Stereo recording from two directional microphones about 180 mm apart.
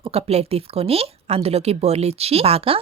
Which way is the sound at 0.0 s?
35° right (ahead or behind).